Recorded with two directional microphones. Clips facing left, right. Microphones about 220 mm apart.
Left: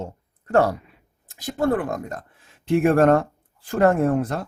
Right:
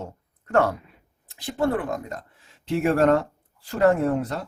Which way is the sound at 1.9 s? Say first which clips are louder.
Left 1 dB; 50° left (ahead or behind).